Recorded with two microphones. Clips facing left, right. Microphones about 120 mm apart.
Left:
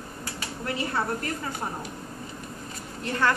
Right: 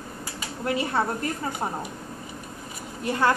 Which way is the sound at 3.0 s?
15° right (ahead or behind).